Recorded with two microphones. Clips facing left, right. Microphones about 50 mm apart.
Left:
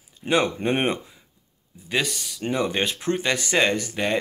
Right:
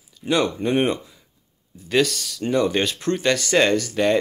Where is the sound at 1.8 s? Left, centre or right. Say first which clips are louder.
Right 6 dB; centre.